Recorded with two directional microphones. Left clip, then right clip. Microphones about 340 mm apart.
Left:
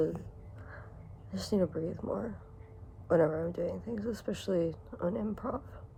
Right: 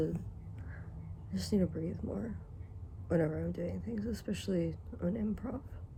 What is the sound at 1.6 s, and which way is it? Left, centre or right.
Speech, left.